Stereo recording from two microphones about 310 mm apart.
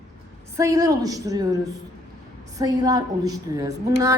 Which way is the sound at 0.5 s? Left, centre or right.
Centre.